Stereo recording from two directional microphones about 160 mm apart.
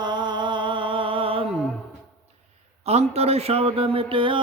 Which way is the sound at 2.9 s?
40° right (ahead or behind).